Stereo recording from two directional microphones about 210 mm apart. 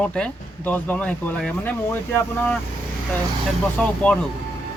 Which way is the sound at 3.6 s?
5° left (ahead or behind).